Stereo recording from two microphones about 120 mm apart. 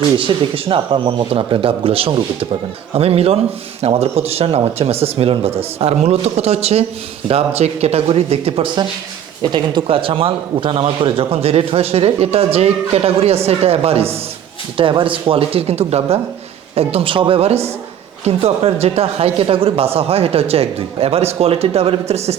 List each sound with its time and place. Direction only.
0.2 s a man's voice: 45° right (ahead or behind)
9.4 s a man's voice: 40° right (ahead or behind); by 22.4 s 60° right (ahead or behind)